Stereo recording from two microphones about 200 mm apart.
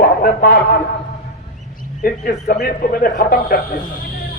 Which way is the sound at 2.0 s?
45° left (ahead or behind).